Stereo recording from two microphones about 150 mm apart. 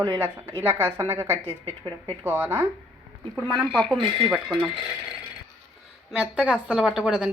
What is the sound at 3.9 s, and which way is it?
Speech, 30° right (ahead or behind).